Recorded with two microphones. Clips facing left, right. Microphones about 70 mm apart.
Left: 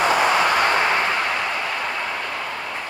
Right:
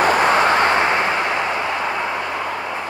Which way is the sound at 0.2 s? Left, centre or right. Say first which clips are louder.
Right 3 dB; right.